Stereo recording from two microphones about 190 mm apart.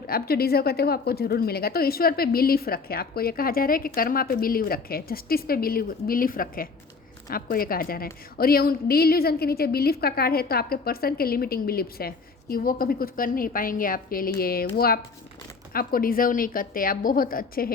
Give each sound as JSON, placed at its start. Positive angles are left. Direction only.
{"t": 0.1, "sound": "a woman's voice", "side_deg": 55}